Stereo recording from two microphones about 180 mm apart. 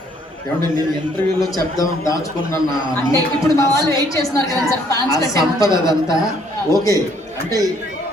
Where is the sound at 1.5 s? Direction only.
20° left (ahead or behind).